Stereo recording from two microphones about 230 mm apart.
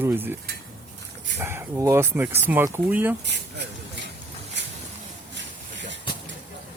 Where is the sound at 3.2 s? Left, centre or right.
Right.